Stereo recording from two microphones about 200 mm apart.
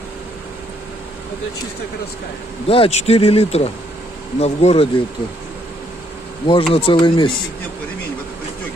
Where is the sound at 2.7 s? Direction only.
30° left (ahead or behind).